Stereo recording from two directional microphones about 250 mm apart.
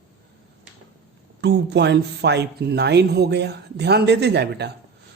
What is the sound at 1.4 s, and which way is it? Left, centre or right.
Speech, right.